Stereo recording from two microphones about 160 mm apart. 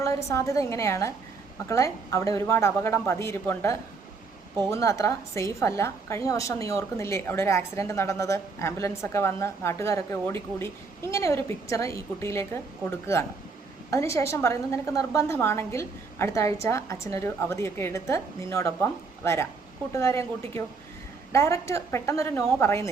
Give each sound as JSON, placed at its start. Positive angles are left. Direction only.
{"t": 0.3, "sound": "a woman's voice", "side_deg": 20}
{"t": 13.9, "sound": "a woman's voice", "side_deg": 20}